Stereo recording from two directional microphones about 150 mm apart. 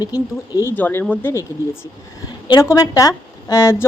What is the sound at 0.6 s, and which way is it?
A woman's voice, 10° left (ahead or behind).